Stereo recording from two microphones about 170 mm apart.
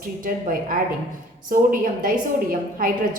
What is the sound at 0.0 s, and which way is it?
A woman's voice, 55° right (ahead or behind).